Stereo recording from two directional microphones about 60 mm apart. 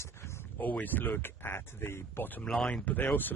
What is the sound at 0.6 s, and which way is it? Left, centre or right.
Speech, left.